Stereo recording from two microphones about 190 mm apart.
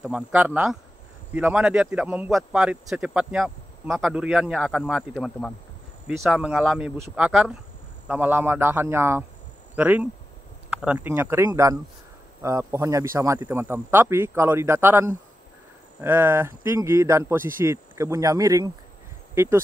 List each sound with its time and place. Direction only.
0.0 s speech: 5° right (ahead or behind)